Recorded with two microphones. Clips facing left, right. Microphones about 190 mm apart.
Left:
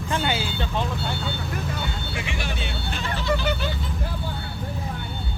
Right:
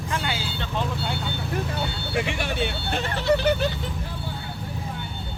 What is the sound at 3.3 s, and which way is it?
Vehicle, 40° right (ahead or behind).